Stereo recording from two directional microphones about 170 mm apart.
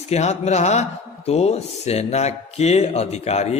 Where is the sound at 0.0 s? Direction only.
40° left (ahead or behind).